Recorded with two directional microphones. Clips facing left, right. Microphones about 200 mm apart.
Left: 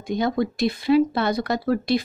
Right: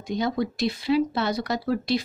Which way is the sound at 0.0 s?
50° left (ahead or behind).